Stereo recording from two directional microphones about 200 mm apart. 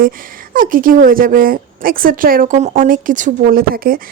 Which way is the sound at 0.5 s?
45° right (ahead or behind).